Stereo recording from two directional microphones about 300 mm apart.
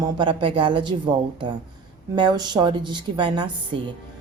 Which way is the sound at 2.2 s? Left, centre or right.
Centre.